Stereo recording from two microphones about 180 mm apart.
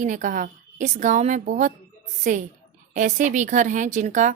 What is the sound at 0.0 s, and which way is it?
A woman's voice, 45° right (ahead or behind).